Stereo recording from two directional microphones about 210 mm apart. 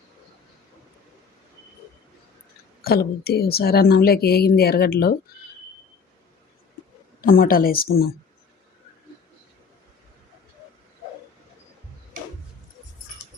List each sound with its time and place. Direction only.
2.8 s speech: 45° left (ahead or behind)
7.2 s speech: 45° left (ahead or behind)